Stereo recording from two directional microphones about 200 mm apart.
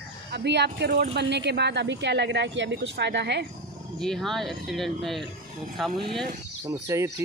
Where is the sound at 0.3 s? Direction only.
60° right (ahead or behind).